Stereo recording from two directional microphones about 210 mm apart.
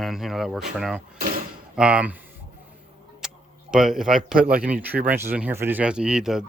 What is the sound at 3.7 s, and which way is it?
Speech, 5° right (ahead or behind).